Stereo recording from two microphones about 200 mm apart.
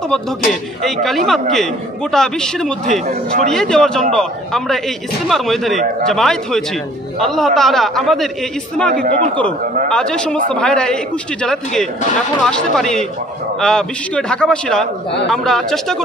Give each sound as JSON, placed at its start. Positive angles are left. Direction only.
{"t": 0.1, "sound": "speech", "side_deg": 0}
{"t": 2.9, "sound": "speech", "side_deg": -40}
{"t": 3.4, "sound": "speech", "side_deg": 5}
{"t": 8.9, "sound": "a man's voice", "side_deg": -40}
{"t": 9.8, "sound": "speech", "side_deg": 5}